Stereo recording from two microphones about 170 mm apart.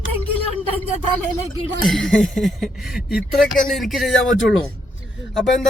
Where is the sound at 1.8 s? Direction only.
Centre (ahead or behind).